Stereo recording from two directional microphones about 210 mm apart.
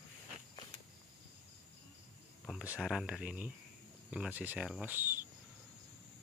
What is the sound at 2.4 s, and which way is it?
Speech, 5° right (ahead or behind).